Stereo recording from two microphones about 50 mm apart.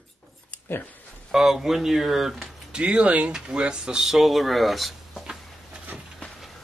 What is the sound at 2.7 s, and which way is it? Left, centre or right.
Speech, right.